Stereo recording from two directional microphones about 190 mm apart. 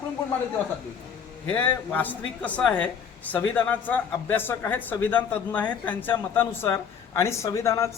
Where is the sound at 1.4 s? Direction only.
10° left (ahead or behind).